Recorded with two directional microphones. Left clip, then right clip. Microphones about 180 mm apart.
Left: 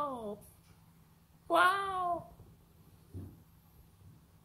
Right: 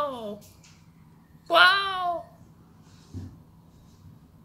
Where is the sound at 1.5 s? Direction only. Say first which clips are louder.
Right 9 dB; 20° left (ahead or behind).